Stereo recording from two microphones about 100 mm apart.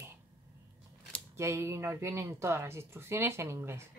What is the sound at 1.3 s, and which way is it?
Speech, 25° right (ahead or behind).